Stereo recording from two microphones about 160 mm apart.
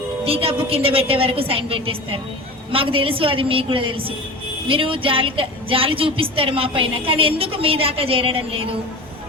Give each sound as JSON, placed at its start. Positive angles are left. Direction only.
{"t": 0.3, "sound": "a woman's voice", "side_deg": -35}